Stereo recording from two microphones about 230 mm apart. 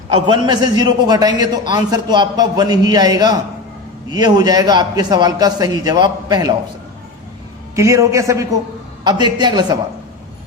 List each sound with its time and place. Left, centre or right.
0.1 s a man's voice: right
7.8 s a man's voice: centre